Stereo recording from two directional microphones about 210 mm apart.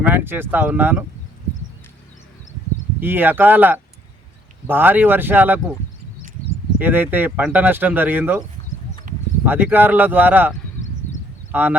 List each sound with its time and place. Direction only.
0.0 s speech: 10° right (ahead or behind)
3.0 s speech: 10° right (ahead or behind)
6.7 s speech: 10° right (ahead or behind)
9.1 s a sound: 40° right (ahead or behind)
9.5 s speech: 10° right (ahead or behind)
11.5 s speech: 10° right (ahead or behind)